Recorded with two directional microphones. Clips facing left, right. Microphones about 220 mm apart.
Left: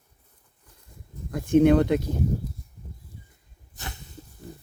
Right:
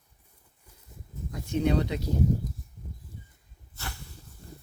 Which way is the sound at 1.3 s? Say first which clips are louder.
Left 9 dB; 55° left (ahead or behind).